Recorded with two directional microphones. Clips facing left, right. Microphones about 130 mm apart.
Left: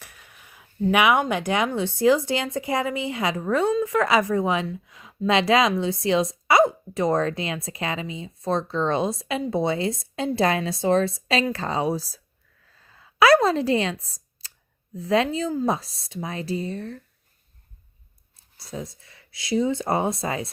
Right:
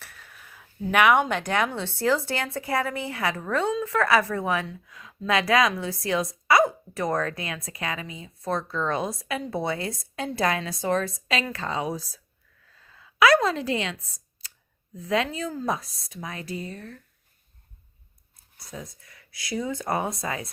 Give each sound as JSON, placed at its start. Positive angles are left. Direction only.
{"t": 0.0, "sound": "a woman's voice", "side_deg": 15}
{"t": 12.7, "sound": "a sound", "side_deg": 35}
{"t": 14.9, "sound": "a woman's voice", "side_deg": 30}
{"t": 18.6, "sound": "a woman's voice", "side_deg": 30}